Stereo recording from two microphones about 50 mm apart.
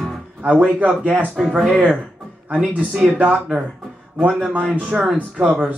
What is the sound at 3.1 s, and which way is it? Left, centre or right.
Speech, right.